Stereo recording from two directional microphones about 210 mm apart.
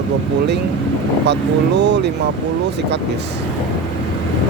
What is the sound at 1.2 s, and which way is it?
Speech, 55° right (ahead or behind).